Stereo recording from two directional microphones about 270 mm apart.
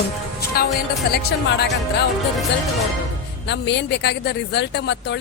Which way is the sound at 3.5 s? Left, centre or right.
Left.